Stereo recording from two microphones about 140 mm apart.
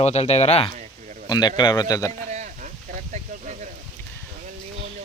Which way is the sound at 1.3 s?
30° left (ahead or behind).